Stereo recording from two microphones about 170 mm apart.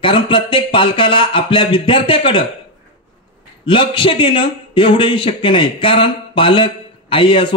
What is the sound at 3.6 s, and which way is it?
A man's voice, 30° left (ahead or behind).